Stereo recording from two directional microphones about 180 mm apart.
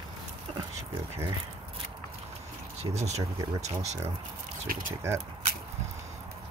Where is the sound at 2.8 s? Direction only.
35° right (ahead or behind).